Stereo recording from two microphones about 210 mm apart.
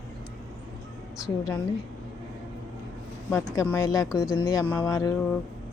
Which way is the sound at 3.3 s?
15° left (ahead or behind).